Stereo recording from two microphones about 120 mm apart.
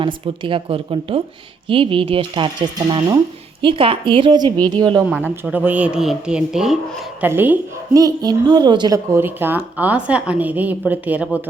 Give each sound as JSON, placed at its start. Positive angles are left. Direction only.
{"t": 0.0, "sound": "speech", "side_deg": -45}
{"t": 3.6, "sound": "a woman's voice", "side_deg": -45}
{"t": 5.2, "sound": "a woman's voice", "side_deg": -15}
{"t": 7.2, "sound": "a woman's voice", "side_deg": -15}
{"t": 7.9, "sound": "a woman's voice", "side_deg": -30}
{"t": 9.1, "sound": "a woman's voice", "side_deg": -15}